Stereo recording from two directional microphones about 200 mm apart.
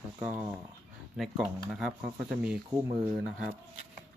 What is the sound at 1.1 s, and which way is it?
Speech, centre (ahead or behind).